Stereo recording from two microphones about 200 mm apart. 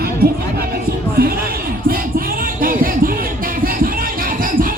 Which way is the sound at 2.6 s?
45° right (ahead or behind).